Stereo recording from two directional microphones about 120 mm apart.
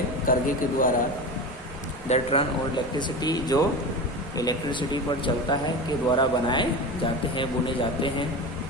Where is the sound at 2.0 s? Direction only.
60° left (ahead or behind).